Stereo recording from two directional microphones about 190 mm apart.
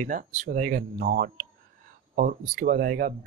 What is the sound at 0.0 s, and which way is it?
Speech, 45° right (ahead or behind).